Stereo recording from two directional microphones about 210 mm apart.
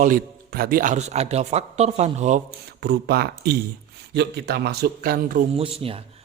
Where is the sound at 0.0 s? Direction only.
40° right (ahead or behind).